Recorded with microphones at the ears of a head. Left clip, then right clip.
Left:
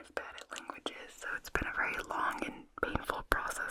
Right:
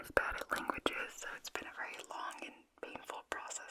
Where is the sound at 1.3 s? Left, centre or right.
Left.